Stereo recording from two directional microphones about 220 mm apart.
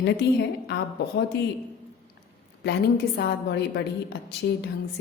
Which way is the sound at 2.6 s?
50° left (ahead or behind).